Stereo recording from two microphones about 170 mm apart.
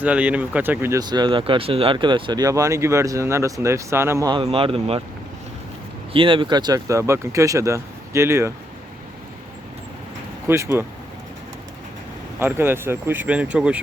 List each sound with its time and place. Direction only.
0.0 s speech: 10° right (ahead or behind)
4.3 s speech: 30° right (ahead or behind)
6.1 s speech: 30° right (ahead or behind)
10.4 s speech: 15° right (ahead or behind)
12.4 s speech: 15° right (ahead or behind)